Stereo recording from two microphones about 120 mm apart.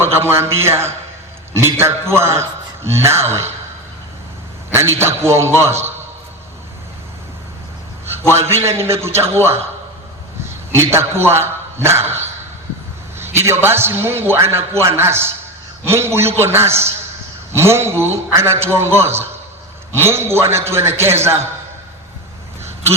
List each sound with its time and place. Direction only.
0.0 s a man's voice: 20° right (ahead or behind)
4.7 s a man's voice: 20° right (ahead or behind)
8.0 s a man's voice: 20° right (ahead or behind)
10.8 s a man's voice: 20° right (ahead or behind)
13.1 s a man's voice: 20° right (ahead or behind)